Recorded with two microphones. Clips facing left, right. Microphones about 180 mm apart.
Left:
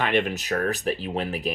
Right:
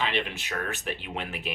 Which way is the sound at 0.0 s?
50° left (ahead or behind).